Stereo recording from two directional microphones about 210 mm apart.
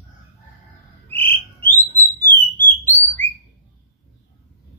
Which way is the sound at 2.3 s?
10° left (ahead or behind).